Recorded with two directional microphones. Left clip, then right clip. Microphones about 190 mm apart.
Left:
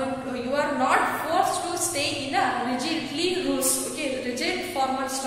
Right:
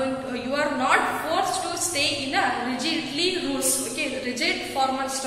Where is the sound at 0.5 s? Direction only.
10° left (ahead or behind).